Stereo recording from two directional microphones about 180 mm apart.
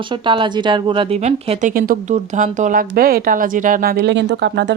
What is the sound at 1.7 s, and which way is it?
Speech, 50° right (ahead or behind).